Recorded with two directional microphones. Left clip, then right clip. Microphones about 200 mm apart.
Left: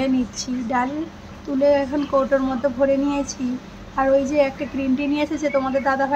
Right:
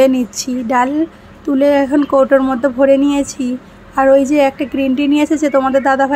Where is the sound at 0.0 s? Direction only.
45° right (ahead or behind).